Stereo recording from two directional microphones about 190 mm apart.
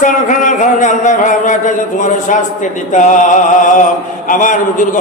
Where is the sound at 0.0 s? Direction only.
40° left (ahead or behind).